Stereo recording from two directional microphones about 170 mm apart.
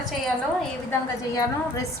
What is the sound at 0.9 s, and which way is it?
Speech, 20° left (ahead or behind).